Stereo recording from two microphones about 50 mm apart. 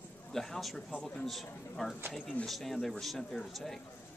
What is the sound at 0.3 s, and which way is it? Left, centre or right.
A man's voice, centre.